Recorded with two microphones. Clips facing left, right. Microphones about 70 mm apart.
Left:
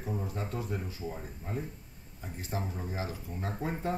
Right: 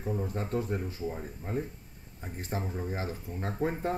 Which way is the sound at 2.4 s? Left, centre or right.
Right.